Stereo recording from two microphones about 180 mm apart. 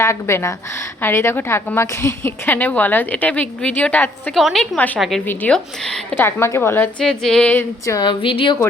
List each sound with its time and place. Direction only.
0.0 s a woman's voice: 15° left (ahead or behind)
6.2 s a woman's voice: 15° left (ahead or behind)
7.9 s speech: 20° left (ahead or behind)